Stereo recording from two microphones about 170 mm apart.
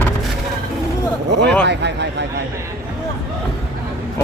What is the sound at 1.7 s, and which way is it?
Speech, 90° right.